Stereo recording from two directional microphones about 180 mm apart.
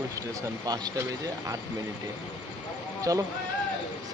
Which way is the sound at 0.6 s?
20° right (ahead or behind).